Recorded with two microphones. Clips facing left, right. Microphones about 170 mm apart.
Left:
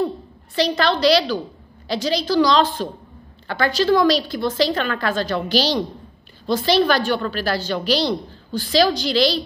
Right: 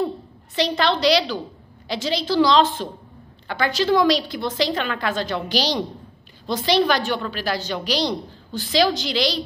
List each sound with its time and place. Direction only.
0.6 s a woman's voice: 20° right (ahead or behind)